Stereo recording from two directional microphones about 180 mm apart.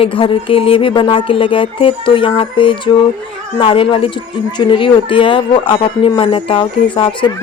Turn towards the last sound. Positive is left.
turn(degrees=30)  # may be behind; listen again after turning